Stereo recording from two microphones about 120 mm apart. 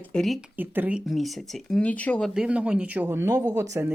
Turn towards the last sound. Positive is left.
turn(degrees=-25)  # may be behind; listen again after turning